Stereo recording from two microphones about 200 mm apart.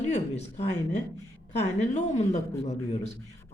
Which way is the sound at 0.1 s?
30° left (ahead or behind).